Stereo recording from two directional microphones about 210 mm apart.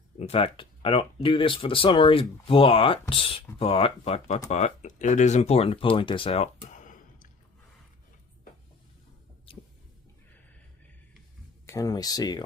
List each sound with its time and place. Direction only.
0.2 s speech: 30° left (ahead or behind)
9.5 s a sound: 25° left (ahead or behind)
11.6 s speech: 15° left (ahead or behind)